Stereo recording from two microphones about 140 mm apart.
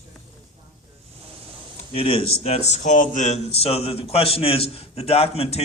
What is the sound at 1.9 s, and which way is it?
A man's voice, 40° left (ahead or behind).